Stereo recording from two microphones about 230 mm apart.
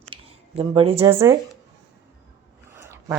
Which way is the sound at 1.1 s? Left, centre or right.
Centre.